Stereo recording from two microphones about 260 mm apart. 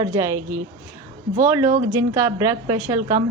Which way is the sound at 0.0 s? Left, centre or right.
Centre.